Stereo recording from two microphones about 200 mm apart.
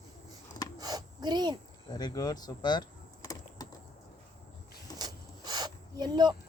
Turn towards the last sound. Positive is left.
turn(degrees=-20)  # may be behind; listen again after turning